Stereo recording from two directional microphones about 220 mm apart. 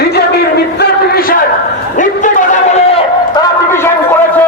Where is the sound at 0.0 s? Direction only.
45° left (ahead or behind).